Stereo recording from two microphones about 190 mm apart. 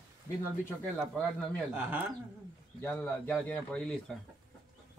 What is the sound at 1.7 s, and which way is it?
Speech, 10° right (ahead or behind).